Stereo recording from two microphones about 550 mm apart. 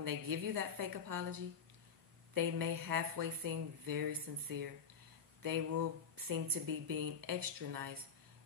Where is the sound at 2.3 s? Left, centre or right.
Right.